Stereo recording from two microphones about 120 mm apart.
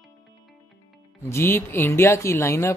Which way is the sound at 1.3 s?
20° left (ahead or behind).